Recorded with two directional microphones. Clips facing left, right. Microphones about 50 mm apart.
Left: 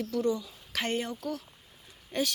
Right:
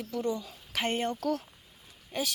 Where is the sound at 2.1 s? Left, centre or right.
Centre.